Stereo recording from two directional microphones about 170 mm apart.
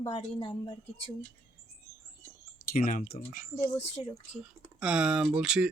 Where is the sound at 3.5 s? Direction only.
40° left (ahead or behind).